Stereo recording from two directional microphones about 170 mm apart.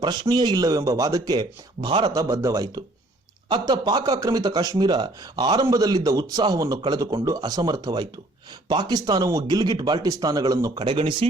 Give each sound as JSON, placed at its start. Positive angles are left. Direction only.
{"t": 0.0, "sound": "speech", "side_deg": -25}